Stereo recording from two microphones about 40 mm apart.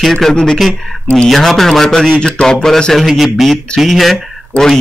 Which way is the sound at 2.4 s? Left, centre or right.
Centre.